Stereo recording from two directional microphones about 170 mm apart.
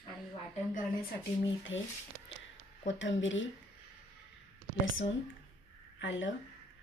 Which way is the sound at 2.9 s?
90° left.